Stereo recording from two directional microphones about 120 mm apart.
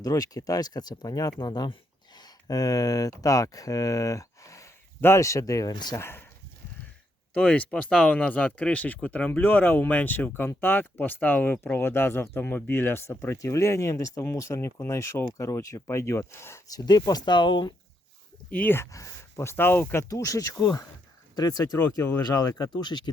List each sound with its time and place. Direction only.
0.0 s speech: 30° left (ahead or behind)
6.0 s speech: 20° left (ahead or behind)
7.3 s speech: 10° left (ahead or behind); by 17.7 s 40° left (ahead or behind)
18.5 s speech: 15° left (ahead or behind); by 23.0 s 40° left (ahead or behind)